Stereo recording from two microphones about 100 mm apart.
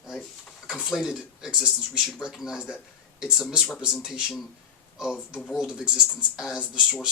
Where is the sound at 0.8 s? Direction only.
5° right (ahead or behind).